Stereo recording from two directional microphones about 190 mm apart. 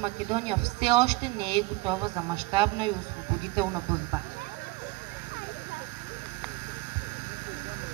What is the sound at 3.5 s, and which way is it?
Speech, 15° right (ahead or behind).